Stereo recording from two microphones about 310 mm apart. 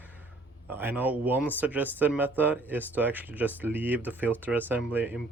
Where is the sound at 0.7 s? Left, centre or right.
Centre.